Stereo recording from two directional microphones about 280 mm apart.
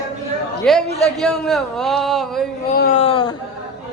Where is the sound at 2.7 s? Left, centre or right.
Left.